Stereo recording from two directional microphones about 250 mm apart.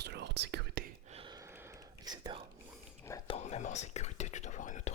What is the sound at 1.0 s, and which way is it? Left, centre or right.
Whispering, right.